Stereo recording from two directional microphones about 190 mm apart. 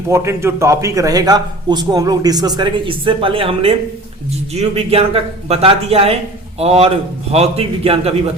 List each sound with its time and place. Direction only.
0.1 s a man's voice: 15° right (ahead or behind); by 8.1 s 30° right (ahead or behind)